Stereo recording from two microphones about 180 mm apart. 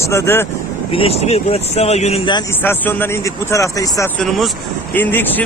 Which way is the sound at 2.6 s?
10° left (ahead or behind).